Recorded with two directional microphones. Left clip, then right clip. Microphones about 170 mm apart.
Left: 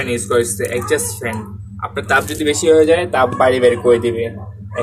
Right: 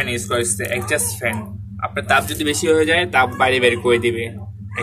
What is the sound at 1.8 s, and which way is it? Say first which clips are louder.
Speech: left 1 dB; 15° right (ahead or behind).